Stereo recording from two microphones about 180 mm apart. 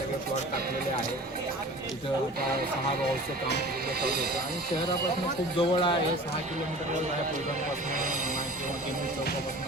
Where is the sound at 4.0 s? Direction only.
60° right (ahead or behind).